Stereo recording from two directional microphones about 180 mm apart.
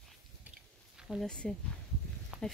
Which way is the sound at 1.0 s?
Centre (ahead or behind).